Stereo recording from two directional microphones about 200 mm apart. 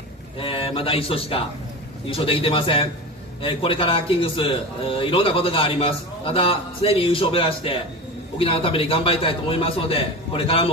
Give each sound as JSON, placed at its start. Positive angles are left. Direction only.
{"t": 0.4, "sound": "a man's voice", "side_deg": 25}